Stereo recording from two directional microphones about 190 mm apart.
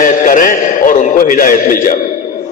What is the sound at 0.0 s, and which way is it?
A man's voice, 45° left (ahead or behind).